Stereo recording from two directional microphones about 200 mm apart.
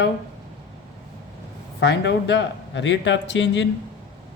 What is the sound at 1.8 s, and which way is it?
Speech, 60° left (ahead or behind).